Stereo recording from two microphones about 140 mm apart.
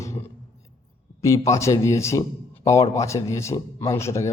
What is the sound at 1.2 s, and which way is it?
A man's voice, 20° left (ahead or behind).